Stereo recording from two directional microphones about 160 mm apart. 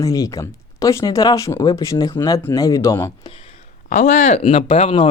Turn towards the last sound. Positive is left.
turn(degrees=35)  # may be behind; listen again after turning